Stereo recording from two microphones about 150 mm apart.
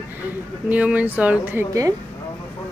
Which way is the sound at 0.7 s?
10° right (ahead or behind).